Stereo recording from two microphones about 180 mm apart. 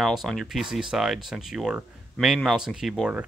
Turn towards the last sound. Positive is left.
turn(degrees=-5)  # may be behind; listen again after turning